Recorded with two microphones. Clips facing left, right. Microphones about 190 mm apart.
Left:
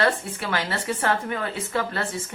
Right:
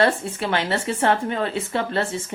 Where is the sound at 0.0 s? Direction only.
25° right (ahead or behind).